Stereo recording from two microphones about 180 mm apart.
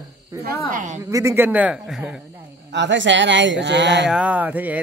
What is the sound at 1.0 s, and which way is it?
Speech, 15° right (ahead or behind).